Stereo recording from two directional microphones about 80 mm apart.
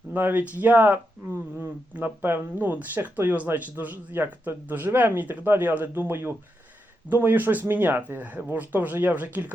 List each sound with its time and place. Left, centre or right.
0.1 s speech: right